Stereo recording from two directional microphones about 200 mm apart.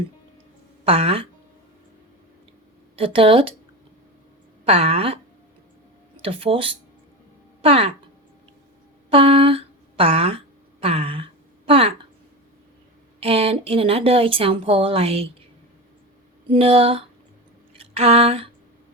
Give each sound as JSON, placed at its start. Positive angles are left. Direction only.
{"t": 0.9, "sound": "speech", "side_deg": -30}
{"t": 3.0, "sound": "speech", "side_deg": -25}
{"t": 4.6, "sound": "speech", "side_deg": -30}
{"t": 6.2, "sound": "speech", "side_deg": -30}
{"t": 9.0, "sound": "a sound", "side_deg": -30}
{"t": 13.1, "sound": "speech", "side_deg": -30}
{"t": 16.5, "sound": "speech", "side_deg": -30}
{"t": 17.7, "sound": "a sound", "side_deg": -30}